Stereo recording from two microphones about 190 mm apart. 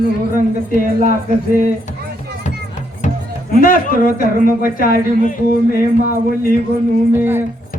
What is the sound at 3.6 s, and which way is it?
A man's voice, 50° left (ahead or behind).